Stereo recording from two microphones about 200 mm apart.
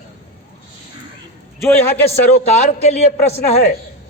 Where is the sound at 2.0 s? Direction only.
35° left (ahead or behind).